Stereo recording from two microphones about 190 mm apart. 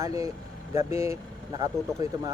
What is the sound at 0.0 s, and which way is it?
Speech, 15° right (ahead or behind).